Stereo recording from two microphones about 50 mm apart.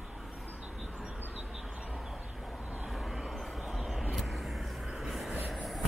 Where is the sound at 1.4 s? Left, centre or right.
Centre.